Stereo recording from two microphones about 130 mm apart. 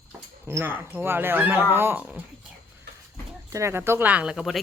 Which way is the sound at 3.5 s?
20° right (ahead or behind).